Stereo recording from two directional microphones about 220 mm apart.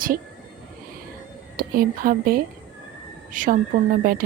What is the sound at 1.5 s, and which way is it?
A woman's voice, 40° right (ahead or behind).